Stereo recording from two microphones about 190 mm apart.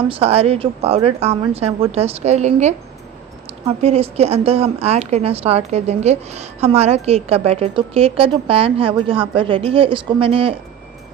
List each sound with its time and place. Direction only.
0.1 s a woman's voice: 30° right (ahead or behind)